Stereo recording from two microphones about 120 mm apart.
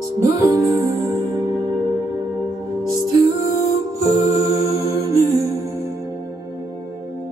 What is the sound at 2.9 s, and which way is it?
Music, 30° right (ahead or behind).